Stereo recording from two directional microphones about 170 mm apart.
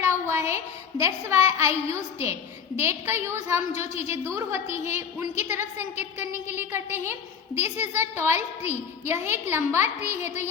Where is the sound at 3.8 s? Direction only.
40° left (ahead or behind).